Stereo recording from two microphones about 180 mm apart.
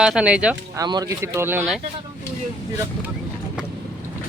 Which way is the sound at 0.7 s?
20° right (ahead or behind).